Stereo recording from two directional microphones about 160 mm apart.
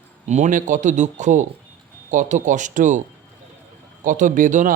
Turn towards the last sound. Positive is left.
turn(degrees=-55)  # may be behind; listen again after turning